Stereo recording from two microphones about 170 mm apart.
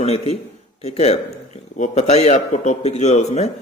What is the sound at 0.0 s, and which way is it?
Speech, 40° left (ahead or behind).